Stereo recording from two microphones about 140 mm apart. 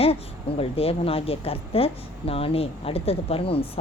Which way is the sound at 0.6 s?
45° left (ahead or behind).